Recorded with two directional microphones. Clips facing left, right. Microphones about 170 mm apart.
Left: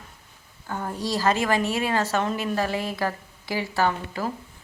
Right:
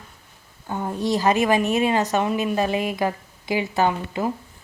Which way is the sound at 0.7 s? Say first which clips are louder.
Right 5 dB; 20° right (ahead or behind).